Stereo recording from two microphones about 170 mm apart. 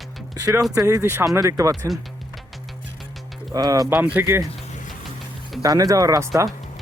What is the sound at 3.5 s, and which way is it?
Speech, 20° right (ahead or behind).